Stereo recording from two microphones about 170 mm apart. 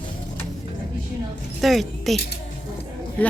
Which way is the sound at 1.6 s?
Centre (ahead or behind).